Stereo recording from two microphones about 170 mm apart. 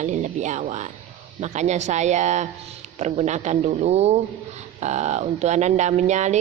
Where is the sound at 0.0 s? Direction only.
45° right (ahead or behind).